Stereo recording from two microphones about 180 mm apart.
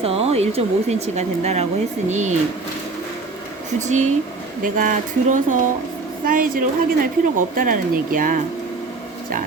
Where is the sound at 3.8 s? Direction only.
40° right (ahead or behind).